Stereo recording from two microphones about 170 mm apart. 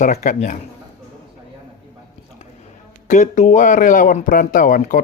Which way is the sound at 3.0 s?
45° left (ahead or behind).